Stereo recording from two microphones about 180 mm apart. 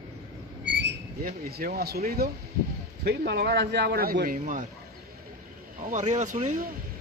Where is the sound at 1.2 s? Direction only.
55° right (ahead or behind).